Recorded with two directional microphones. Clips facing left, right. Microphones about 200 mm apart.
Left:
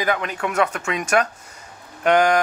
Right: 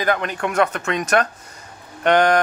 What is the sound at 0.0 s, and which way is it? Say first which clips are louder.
Speech: right 2 dB; 5° left (ahead or behind).